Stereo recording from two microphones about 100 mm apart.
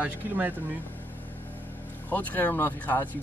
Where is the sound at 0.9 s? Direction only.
20° left (ahead or behind).